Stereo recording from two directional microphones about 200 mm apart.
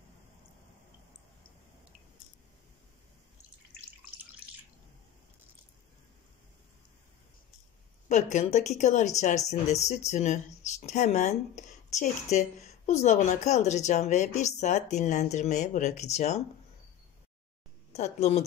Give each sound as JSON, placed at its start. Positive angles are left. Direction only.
{"t": 8.1, "sound": "speech", "side_deg": 35}
{"t": 17.9, "sound": "speech", "side_deg": 35}